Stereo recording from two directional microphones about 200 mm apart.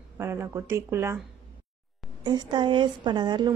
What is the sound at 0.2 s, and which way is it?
A woman's voice, 15° right (ahead or behind).